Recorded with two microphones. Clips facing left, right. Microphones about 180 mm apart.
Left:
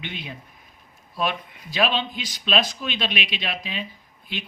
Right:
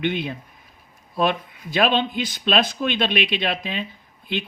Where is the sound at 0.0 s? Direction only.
55° right (ahead or behind).